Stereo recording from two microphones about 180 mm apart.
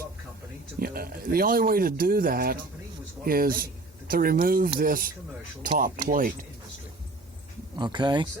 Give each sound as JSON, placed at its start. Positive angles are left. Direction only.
{"t": 0.8, "sound": "speech", "side_deg": -55}
{"t": 7.8, "sound": "speech", "side_deg": -25}